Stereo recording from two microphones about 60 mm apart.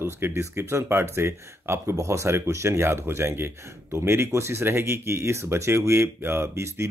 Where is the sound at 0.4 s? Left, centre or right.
Right.